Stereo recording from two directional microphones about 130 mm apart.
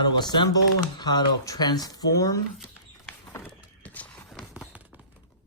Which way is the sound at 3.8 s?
10° left (ahead or behind).